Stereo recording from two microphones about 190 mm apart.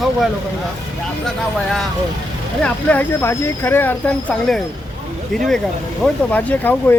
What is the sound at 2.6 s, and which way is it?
Speech, 10° left (ahead or behind).